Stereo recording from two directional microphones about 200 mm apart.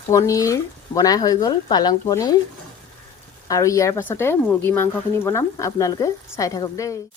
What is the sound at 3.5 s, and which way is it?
A woman's voice, 15° left (ahead or behind).